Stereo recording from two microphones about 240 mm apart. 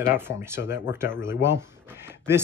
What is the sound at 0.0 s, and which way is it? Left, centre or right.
Speech, centre.